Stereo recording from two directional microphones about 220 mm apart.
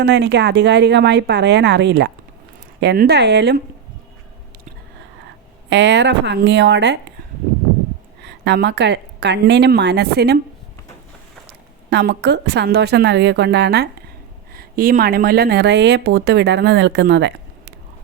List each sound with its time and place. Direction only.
0.0 s speech: 50° right (ahead or behind)
5.6 s speech: 50° right (ahead or behind)
8.2 s speech: 50° right (ahead or behind)
11.9 s speech: 50° right (ahead or behind)